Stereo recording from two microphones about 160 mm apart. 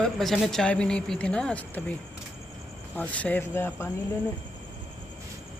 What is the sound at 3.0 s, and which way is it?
Speech, 10° left (ahead or behind).